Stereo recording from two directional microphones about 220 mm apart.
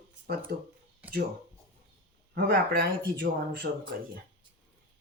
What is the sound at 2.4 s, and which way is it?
Speech, 40° right (ahead or behind).